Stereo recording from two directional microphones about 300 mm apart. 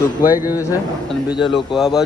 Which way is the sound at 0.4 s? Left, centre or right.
Centre.